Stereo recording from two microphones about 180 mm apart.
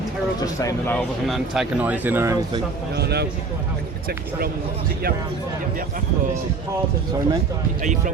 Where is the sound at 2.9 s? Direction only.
65° right (ahead or behind).